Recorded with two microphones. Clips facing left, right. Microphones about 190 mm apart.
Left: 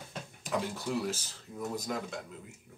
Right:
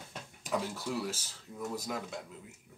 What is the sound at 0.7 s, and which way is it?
Speech, 5° right (ahead or behind).